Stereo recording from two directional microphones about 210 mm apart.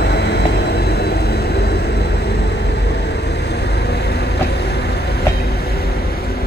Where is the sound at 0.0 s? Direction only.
50° left (ahead or behind).